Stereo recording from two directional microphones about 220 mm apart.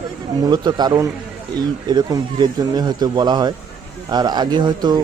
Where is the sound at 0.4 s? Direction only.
20° right (ahead or behind).